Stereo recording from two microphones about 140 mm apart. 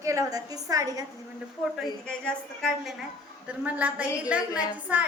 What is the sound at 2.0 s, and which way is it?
Speech, 5° left (ahead or behind).